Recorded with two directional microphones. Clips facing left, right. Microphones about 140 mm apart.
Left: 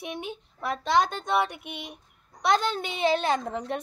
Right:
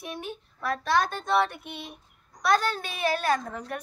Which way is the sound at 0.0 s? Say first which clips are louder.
Left 1 dB; 20° left (ahead or behind).